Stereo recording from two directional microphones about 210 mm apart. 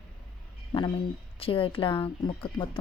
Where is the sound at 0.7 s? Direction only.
20° left (ahead or behind).